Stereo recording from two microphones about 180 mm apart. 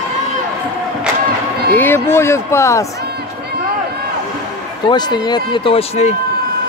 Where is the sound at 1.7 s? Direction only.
10° left (ahead or behind).